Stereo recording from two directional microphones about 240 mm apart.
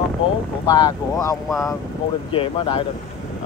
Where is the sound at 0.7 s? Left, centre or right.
Centre.